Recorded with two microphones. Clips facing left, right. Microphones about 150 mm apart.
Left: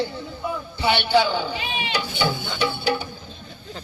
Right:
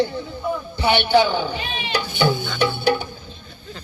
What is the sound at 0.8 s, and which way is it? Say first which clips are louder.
Speech: right 3 dB; 50° right (ahead or behind).